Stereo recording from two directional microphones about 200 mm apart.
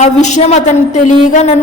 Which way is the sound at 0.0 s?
35° left (ahead or behind).